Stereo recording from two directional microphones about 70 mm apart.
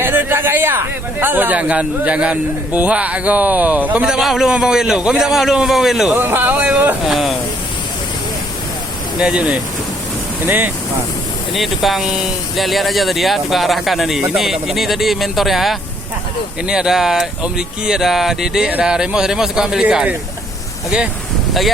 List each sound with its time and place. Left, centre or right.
0.0 s a man's voice: right
4.0 s a man's voice: centre
6.1 s a man's voice: right
7.0 s speech: centre
9.1 s a man's voice: centre
10.4 s a man's voice: right
11.5 s a man's voice: centre